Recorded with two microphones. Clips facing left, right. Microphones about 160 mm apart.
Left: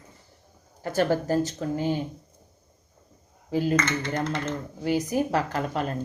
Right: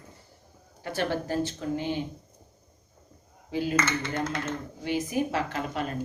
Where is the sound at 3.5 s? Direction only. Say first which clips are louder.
Left 4 dB; 45° left (ahead or behind).